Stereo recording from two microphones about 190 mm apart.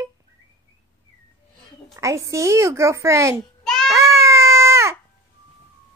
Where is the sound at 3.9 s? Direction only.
15° right (ahead or behind).